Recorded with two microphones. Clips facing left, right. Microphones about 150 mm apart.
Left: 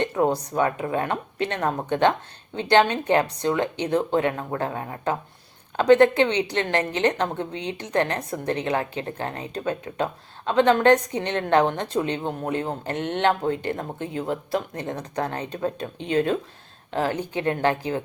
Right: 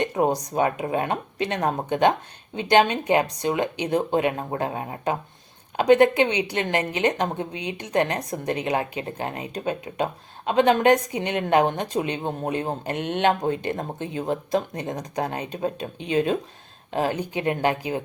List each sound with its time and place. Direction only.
0.2 s a woman's voice: 15° right (ahead or behind)